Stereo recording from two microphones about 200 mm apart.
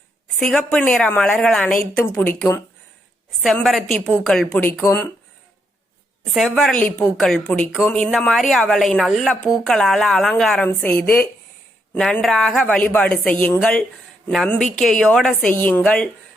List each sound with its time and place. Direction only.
0.3 s a woman's voice: 5° left (ahead or behind)
1.9 s a woman's voice: 15° left (ahead or behind)
3.4 s a woman's voice: centre (ahead or behind)
6.3 s a woman's voice: centre (ahead or behind)